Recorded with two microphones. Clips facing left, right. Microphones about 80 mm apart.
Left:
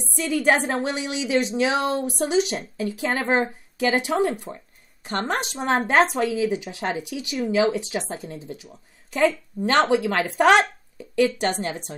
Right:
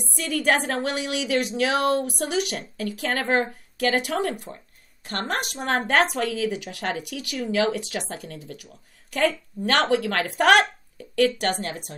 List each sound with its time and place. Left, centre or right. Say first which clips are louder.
0.0 s speech: left 3 dB; left